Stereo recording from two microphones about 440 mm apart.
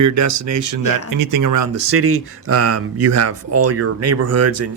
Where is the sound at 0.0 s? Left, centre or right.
Right.